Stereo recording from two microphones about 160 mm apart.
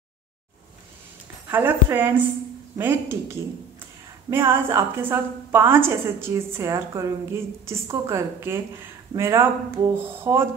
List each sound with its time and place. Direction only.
1.5 s a woman's voice: 15° right (ahead or behind)